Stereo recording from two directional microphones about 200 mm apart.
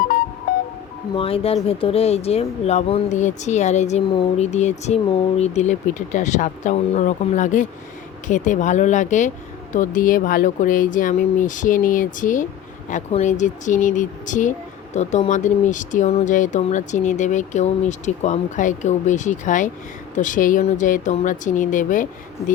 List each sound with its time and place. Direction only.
1.1 s speech: 30° left (ahead or behind)